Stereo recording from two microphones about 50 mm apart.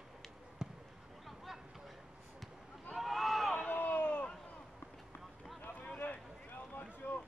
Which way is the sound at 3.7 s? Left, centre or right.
Left.